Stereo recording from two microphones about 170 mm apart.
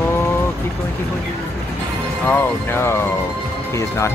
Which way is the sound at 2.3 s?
15° left (ahead or behind).